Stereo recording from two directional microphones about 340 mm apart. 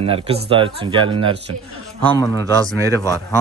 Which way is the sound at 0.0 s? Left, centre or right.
Centre.